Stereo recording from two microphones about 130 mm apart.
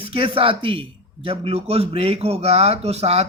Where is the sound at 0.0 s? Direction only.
45° right (ahead or behind).